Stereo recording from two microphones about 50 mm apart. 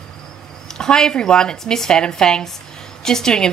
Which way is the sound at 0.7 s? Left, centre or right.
Centre.